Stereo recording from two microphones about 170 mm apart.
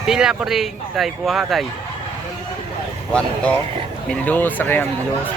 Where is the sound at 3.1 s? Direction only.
5° left (ahead or behind).